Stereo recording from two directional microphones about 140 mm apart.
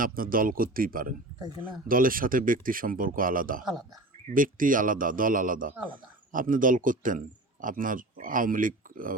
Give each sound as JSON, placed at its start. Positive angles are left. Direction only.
{"t": 0.0, "sound": "speech", "side_deg": -85}